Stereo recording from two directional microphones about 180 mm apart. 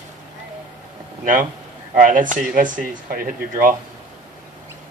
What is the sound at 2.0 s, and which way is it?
Speech, 50° right (ahead or behind).